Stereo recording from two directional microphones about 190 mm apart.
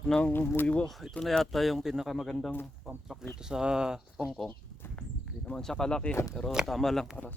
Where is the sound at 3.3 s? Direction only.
5° right (ahead or behind).